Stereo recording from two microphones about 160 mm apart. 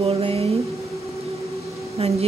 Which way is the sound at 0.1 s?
35° right (ahead or behind).